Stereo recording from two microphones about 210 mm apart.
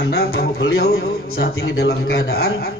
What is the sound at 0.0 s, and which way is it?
A man's voice, 50° left (ahead or behind).